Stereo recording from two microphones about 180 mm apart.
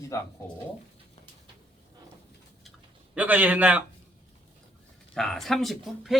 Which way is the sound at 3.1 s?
10° right (ahead or behind).